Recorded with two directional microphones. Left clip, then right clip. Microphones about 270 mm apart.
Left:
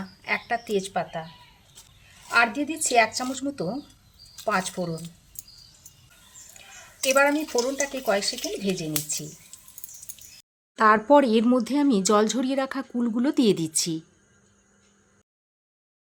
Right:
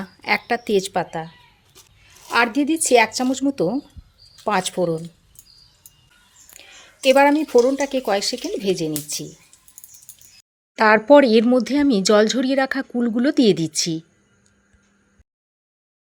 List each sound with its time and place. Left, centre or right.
0.0 s a woman's voice: right
2.2 s speech: right
6.5 s a sound: right
7.0 s speech: right
10.8 s speech: centre